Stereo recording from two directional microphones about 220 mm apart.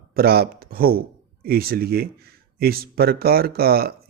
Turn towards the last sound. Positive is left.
turn(degrees=-45)  # may be behind; listen again after turning